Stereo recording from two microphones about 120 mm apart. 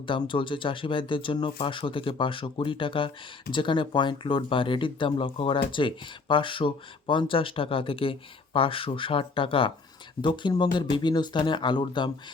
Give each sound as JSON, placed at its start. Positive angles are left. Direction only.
{"t": 0.1, "sound": "speech", "side_deg": 45}